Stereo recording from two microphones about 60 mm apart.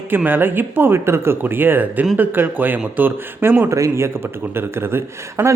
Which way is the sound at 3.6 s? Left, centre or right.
Right.